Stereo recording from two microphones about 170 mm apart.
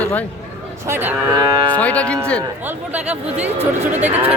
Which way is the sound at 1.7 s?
10° left (ahead or behind).